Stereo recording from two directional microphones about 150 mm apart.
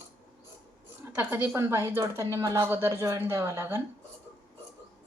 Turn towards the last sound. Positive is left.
turn(degrees=-15)  # may be behind; listen again after turning